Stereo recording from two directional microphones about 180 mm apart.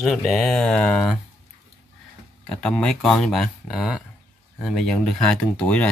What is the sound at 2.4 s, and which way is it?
Speech, 5° left (ahead or behind).